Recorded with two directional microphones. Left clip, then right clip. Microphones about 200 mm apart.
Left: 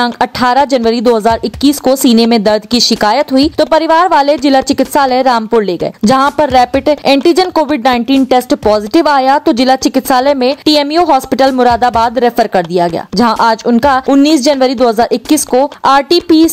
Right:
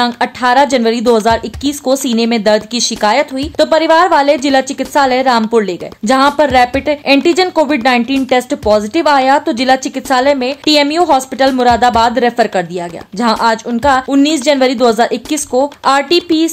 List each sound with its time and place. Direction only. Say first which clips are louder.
0.0 s a woman's voice: left 2 dB; 30° left (ahead or behind)